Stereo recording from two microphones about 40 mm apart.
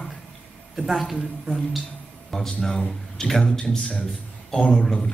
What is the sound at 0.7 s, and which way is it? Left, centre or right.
Speech, centre.